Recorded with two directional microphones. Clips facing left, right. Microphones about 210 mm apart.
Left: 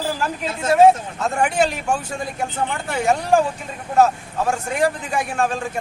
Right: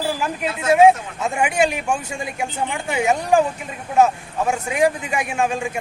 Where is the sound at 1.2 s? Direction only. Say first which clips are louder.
Even; 10° right (ahead or behind).